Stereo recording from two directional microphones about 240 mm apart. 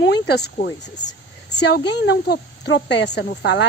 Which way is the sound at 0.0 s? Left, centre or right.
Left.